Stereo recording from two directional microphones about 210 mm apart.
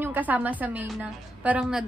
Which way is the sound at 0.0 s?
10° right (ahead or behind).